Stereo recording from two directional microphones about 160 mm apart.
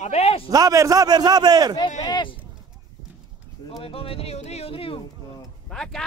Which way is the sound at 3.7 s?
35° left (ahead or behind).